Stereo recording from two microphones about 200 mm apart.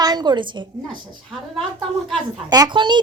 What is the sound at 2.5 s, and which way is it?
Speech, 20° right (ahead or behind).